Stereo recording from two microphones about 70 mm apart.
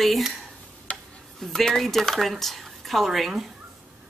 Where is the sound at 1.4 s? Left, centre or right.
Centre.